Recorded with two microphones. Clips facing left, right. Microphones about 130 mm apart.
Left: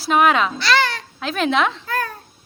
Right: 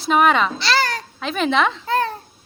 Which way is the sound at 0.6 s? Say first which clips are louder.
Left 1 dB; 35° right (ahead or behind).